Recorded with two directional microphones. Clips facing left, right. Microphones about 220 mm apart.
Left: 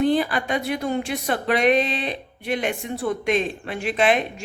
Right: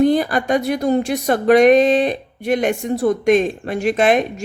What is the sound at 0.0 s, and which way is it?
Speech, 45° right (ahead or behind).